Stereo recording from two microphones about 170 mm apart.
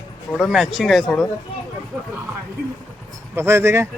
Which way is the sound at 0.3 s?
Centre (ahead or behind).